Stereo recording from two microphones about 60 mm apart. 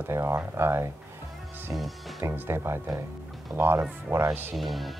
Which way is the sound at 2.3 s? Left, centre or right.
Right.